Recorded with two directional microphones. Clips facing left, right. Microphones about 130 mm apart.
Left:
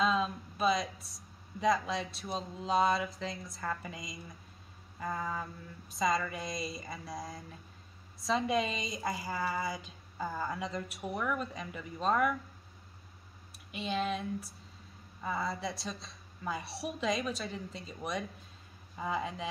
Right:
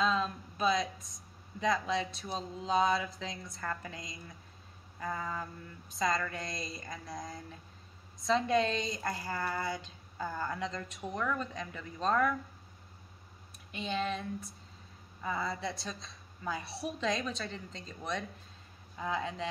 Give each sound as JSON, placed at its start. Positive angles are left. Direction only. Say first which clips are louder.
{"t": 0.0, "sound": "speech", "louder": "left 1 dB", "side_deg": 0}
{"t": 13.7, "sound": "speech", "louder": "left 1 dB", "side_deg": 0}